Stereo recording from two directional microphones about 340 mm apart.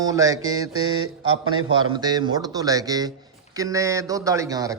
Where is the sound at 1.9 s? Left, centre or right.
Centre.